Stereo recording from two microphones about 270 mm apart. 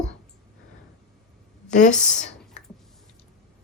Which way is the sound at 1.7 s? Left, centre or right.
Left.